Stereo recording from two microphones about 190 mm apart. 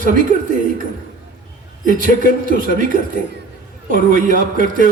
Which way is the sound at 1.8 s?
45° right (ahead or behind).